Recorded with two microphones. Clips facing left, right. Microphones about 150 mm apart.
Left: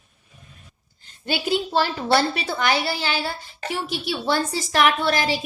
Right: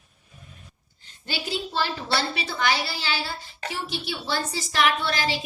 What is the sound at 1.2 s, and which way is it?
A woman's voice, 50° left (ahead or behind).